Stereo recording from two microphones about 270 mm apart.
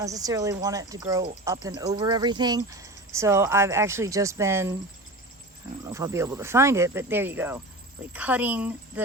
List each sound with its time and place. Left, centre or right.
0.0 s speech: centre
5.8 s speech: centre